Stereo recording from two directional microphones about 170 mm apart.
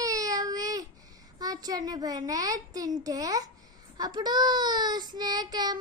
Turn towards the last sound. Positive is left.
turn(degrees=-25)  # may be behind; listen again after turning